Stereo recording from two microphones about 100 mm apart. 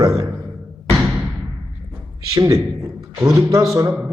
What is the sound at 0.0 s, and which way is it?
Speech, 35° right (ahead or behind).